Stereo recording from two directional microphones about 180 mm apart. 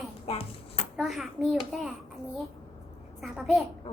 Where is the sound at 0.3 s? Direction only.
35° left (ahead or behind).